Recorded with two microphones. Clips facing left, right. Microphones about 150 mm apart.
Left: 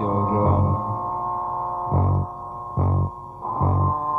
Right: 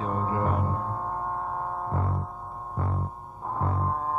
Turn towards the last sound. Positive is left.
turn(degrees=30)  # may be behind; listen again after turning